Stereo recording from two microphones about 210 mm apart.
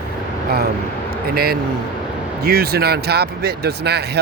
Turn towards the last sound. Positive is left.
turn(degrees=-50)  # may be behind; listen again after turning